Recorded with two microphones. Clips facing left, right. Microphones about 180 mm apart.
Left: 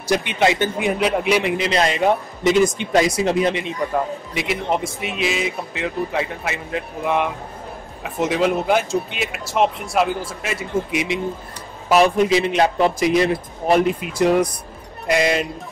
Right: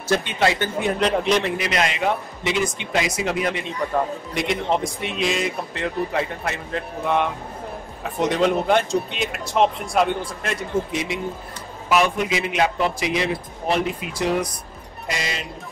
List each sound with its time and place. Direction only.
0.0 s a man's voice: 15° left (ahead or behind)
1.7 s speech: 35° left (ahead or behind)
4.3 s speech: 5° left (ahead or behind)
11.9 s speech: 35° left (ahead or behind)
15.0 s speech: 55° left (ahead or behind)